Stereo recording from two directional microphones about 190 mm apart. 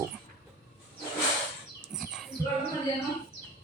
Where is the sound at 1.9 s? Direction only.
5° right (ahead or behind).